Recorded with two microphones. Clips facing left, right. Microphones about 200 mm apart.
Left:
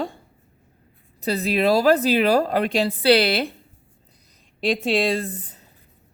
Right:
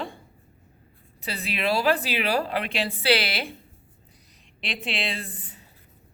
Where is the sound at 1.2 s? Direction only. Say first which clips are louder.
Left 9 dB; 40° left (ahead or behind).